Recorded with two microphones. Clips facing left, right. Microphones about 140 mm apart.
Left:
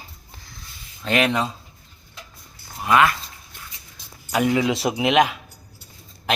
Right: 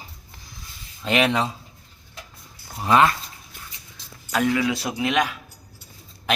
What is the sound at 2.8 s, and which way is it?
Speech, 30° right (ahead or behind).